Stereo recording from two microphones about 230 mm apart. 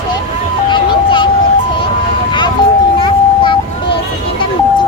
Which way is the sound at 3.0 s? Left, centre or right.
Left.